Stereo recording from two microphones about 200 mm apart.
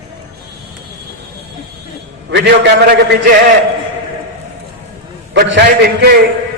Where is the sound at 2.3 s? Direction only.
60° right (ahead or behind).